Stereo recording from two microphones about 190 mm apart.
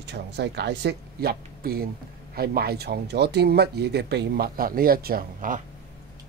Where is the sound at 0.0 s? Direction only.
65° right (ahead or behind).